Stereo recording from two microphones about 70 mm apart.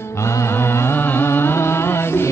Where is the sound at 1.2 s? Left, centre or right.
Left.